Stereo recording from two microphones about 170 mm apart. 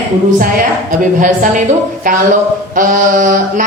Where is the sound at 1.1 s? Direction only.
50° right (ahead or behind).